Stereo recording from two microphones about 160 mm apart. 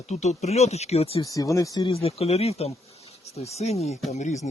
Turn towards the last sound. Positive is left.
turn(degrees=50)  # may be behind; listen again after turning